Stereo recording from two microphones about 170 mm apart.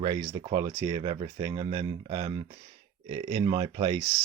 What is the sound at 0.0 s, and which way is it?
Speech, 30° right (ahead or behind).